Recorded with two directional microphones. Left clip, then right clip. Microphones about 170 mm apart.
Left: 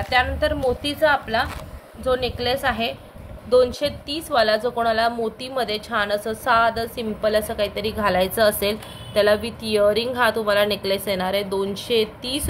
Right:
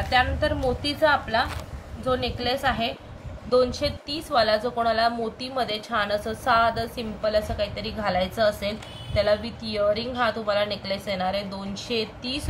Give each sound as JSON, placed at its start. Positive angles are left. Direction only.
{"t": 0.1, "sound": "a woman's voice", "side_deg": 55}